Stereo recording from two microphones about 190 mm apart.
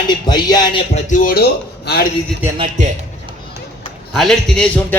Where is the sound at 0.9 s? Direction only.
45° left (ahead or behind).